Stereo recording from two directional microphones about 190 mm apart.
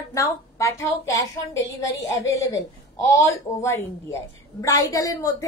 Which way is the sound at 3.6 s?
15° left (ahead or behind).